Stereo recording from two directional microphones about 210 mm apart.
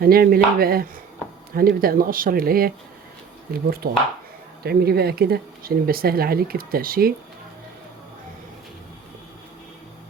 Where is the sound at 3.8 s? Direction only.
45° right (ahead or behind).